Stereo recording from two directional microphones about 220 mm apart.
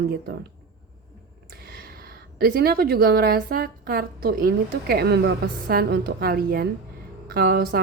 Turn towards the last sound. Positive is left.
turn(degrees=-45)  # may be behind; listen again after turning